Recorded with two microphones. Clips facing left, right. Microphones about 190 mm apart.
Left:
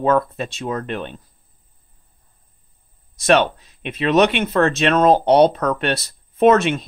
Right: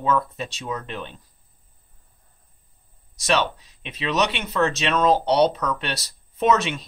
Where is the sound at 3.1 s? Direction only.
55° left (ahead or behind).